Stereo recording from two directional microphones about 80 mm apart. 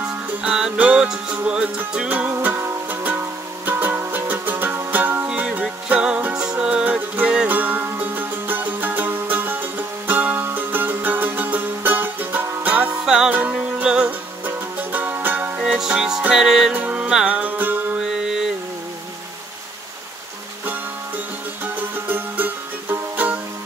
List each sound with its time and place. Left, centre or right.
0.4 s music: centre
15.6 s music: centre
16.7 s music: centre
17.9 s music: centre
21.9 s music: right